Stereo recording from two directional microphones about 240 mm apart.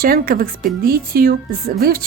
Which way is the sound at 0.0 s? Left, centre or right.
Right.